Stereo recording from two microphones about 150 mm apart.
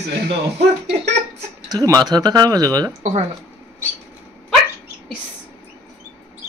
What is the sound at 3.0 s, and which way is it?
Speech, 45° right (ahead or behind).